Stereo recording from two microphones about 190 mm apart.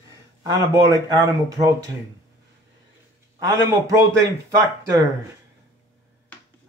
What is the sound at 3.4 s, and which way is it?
Speech, 20° right (ahead or behind).